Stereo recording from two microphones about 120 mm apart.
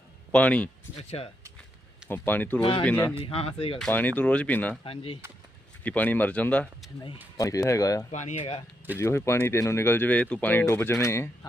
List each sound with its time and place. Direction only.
0.3 s speech: 10° left (ahead or behind)
1.0 s speech: 60° left (ahead or behind)
2.0 s speech: 15° left (ahead or behind)
3.2 s speech: 55° left (ahead or behind)
3.8 s speech: 10° left (ahead or behind)
4.8 s speech: 45° left (ahead or behind)
5.8 s speech: 15° left (ahead or behind)
7.3 s speech: 30° left (ahead or behind)
8.1 s speech: 80° left
8.4 s speech: 55° left (ahead or behind)
9.0 s speech: 20° left (ahead or behind)